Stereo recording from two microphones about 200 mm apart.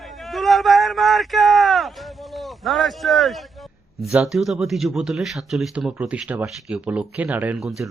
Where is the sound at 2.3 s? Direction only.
Centre (ahead or behind).